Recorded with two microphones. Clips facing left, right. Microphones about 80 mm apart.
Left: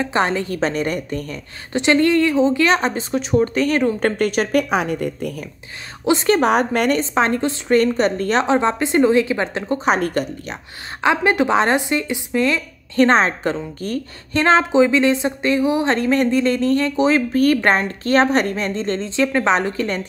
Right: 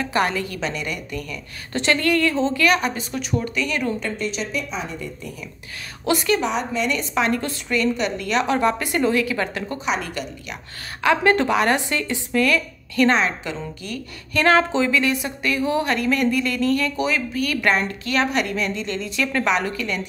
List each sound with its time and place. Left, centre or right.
0.0 s a woman's voice: left
1.7 s speech: left
4.2 s speech: left
6.1 s speech: centre
6.4 s a woman's voice: left
7.0 s a woman's voice: left
7.7 s a woman's voice: left
8.5 s speech: left
9.8 s a woman's voice: left
11.0 s speech: left
14.3 s speech: left
15.9 s speech: left
17.3 s a woman's voice: left